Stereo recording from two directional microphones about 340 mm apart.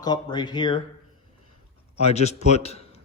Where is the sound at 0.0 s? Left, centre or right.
Centre.